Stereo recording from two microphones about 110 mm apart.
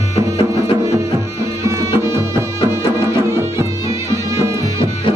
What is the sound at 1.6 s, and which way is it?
Music, 25° right (ahead or behind).